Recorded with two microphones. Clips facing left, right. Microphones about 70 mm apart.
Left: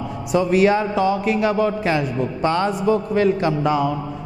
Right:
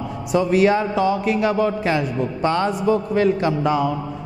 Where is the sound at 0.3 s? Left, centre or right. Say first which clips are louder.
Even; centre.